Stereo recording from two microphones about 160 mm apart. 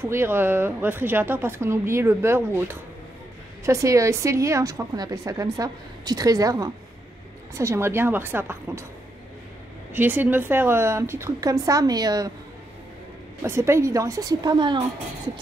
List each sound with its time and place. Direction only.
0.0 s a woman's voice: 15° right (ahead or behind)
9.9 s speech: 10° right (ahead or behind)
13.4 s a woman's voice: 15° right (ahead or behind)